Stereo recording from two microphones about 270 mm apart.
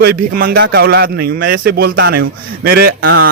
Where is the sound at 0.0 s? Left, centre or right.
Right.